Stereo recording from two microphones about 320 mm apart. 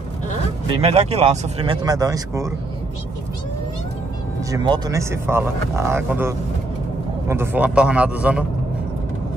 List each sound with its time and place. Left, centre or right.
0.7 s speech: centre
4.5 s a man's voice: centre